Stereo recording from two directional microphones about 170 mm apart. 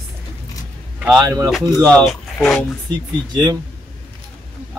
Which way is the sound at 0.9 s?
5° right (ahead or behind).